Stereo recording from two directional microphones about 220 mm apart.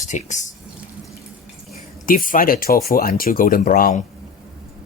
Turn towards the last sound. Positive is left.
turn(degrees=40)  # may be behind; listen again after turning